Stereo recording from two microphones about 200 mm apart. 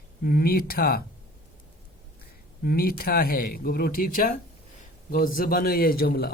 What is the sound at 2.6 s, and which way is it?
A man's voice, 50° left (ahead or behind).